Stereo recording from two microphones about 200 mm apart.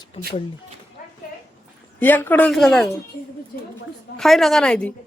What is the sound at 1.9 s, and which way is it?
Speech, 10° left (ahead or behind).